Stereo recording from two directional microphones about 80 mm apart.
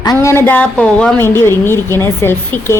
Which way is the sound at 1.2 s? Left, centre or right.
Left.